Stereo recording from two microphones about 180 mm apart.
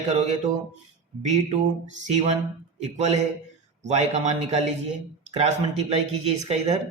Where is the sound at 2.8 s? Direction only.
40° right (ahead or behind).